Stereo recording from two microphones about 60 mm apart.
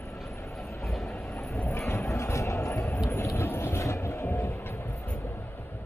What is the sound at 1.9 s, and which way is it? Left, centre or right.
Music, left.